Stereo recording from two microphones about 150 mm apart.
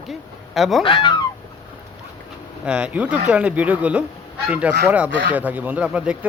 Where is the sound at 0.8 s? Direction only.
35° left (ahead or behind).